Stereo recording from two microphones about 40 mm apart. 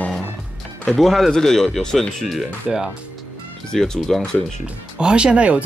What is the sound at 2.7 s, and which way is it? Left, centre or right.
Speech, centre.